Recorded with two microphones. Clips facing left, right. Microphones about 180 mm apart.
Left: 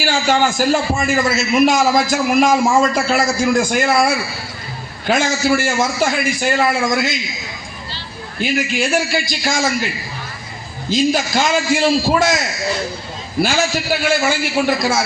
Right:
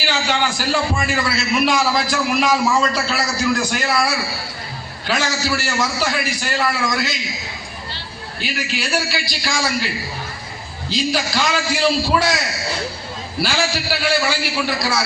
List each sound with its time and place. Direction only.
0.0 s a man's voice: 45° left (ahead or behind)
8.4 s a man's voice: 50° left (ahead or behind)
10.8 s a man's voice: 45° left (ahead or behind)
13.4 s a man's voice: 45° left (ahead or behind)